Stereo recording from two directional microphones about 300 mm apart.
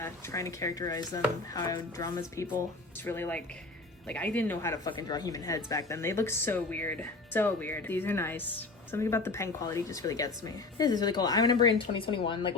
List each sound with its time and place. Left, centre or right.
0.0 s a woman's voice: centre